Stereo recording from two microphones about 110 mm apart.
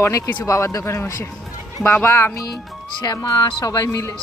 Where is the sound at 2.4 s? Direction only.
35° left (ahead or behind).